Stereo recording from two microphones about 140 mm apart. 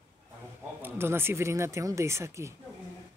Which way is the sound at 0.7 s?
15° right (ahead or behind).